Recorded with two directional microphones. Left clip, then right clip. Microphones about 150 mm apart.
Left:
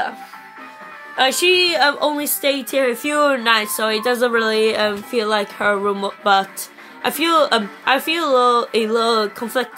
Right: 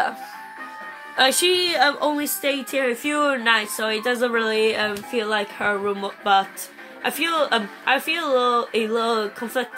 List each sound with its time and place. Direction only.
1.1 s speech: centre (ahead or behind); by 9.7 s 50° left (ahead or behind)